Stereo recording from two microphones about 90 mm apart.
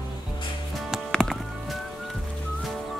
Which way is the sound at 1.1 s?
Centre (ahead or behind).